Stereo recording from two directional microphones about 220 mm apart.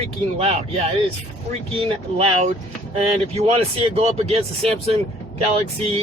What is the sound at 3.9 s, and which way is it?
Speech, 25° right (ahead or behind).